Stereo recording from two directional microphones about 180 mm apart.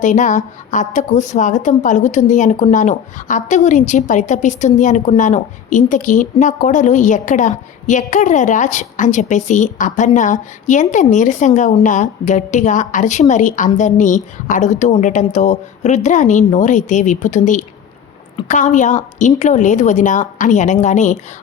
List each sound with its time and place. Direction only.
0.0 s a woman's voice: 45° left (ahead or behind)